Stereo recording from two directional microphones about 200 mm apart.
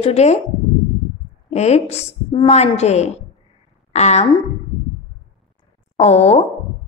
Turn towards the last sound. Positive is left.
turn(degrees=35)  # may be behind; listen again after turning